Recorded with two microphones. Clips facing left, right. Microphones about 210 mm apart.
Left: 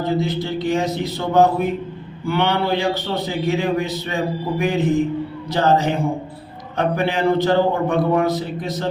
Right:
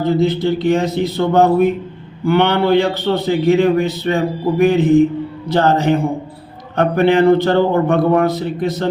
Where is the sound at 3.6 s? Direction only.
60° right (ahead or behind).